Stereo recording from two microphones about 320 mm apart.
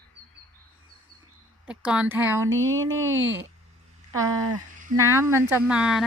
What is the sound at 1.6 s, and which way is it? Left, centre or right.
Speech, centre.